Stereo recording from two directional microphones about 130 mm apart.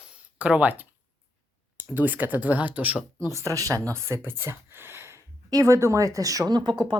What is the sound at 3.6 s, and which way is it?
Speech, 25° right (ahead or behind).